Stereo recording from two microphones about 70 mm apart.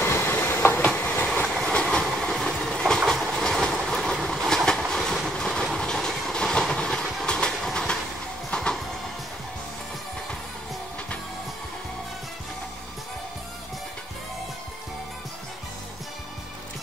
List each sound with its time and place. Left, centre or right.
0.0 s train: left
0.7 s train: left